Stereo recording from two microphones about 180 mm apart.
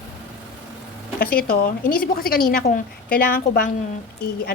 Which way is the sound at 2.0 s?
55° left (ahead or behind).